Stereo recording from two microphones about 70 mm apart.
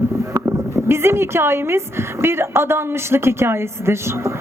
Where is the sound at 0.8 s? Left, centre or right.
Right.